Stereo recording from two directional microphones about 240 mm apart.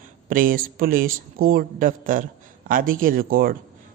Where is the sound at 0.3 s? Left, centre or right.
Right.